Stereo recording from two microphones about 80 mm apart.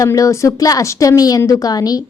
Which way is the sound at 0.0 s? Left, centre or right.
Left.